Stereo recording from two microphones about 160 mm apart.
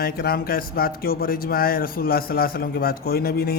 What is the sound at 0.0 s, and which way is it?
A man's voice, 70° left (ahead or behind).